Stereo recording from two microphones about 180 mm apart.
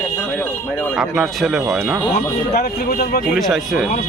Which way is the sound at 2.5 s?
60° left (ahead or behind).